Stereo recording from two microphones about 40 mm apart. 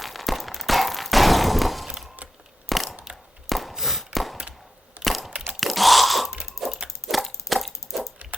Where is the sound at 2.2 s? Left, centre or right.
Right.